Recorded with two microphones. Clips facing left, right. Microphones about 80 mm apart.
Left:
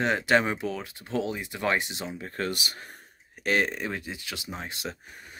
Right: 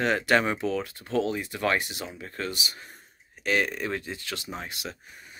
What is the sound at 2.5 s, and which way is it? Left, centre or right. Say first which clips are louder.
Speech: left 1 dB; left.